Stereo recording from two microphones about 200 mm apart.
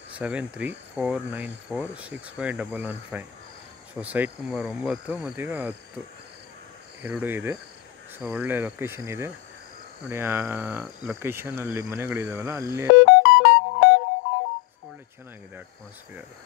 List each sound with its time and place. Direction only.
0.2 s speech: 5° right (ahead or behind)
7.0 s speech: 10° right (ahead or behind)
12.9 s music: 65° left (ahead or behind)